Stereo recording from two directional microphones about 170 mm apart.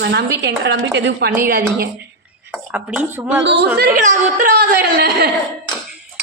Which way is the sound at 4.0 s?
45° right (ahead or behind).